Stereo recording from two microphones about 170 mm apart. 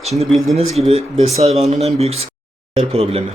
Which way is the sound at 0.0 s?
40° right (ahead or behind).